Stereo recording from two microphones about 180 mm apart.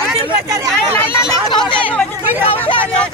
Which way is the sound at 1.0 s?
15° left (ahead or behind).